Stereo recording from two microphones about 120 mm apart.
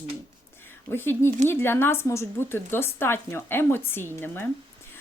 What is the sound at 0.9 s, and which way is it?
A woman's voice, 20° left (ahead or behind).